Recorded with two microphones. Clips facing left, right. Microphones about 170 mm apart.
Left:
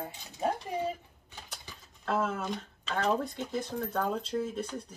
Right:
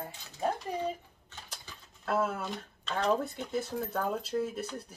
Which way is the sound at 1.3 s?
10° left (ahead or behind).